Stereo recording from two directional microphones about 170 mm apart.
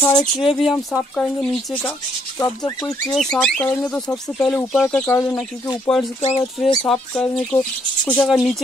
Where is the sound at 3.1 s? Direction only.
Centre (ahead or behind).